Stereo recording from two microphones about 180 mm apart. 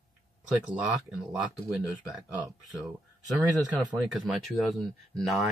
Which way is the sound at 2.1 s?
5° right (ahead or behind).